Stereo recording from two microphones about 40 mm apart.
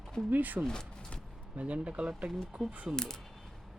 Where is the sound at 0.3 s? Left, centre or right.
Right.